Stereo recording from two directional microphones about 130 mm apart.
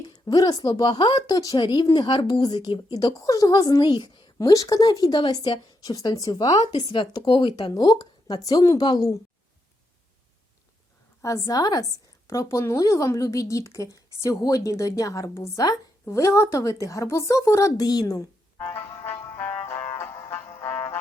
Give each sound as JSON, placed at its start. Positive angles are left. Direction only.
{"t": 0.0, "sound": "a woman's voice", "side_deg": 30}
{"t": 11.2, "sound": "speech", "side_deg": 25}
{"t": 18.7, "sound": "music", "side_deg": 15}